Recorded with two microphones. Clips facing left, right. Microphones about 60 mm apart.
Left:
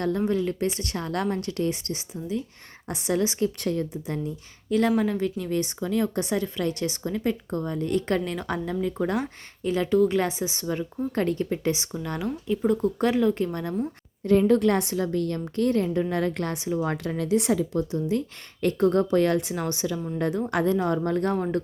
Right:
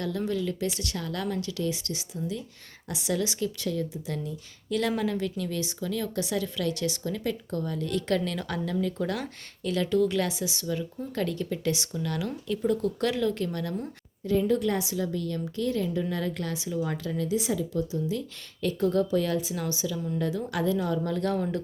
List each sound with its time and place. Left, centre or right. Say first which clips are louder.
0.3 s speech: left 4 dB; left
4.7 s speech: left 5 dB; left
5.5 s speech: left 5 dB; left
14.3 s a woman's voice: left 5 dB; left